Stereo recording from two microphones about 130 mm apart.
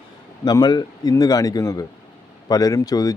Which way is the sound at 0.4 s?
30° left (ahead or behind).